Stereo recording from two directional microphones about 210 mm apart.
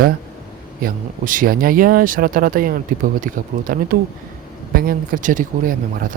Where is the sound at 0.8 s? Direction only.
40° right (ahead or behind).